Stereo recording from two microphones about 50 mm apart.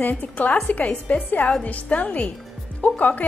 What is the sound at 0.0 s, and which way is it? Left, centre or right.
A woman's voice, left.